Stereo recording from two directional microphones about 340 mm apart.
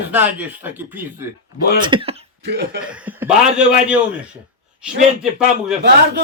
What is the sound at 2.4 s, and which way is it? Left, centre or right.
Speech, right.